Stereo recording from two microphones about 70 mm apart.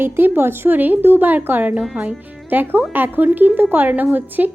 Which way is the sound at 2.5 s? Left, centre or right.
Right.